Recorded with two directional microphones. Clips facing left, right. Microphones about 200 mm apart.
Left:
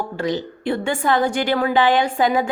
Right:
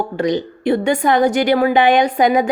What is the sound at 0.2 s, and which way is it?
A woman's voice, 20° right (ahead or behind).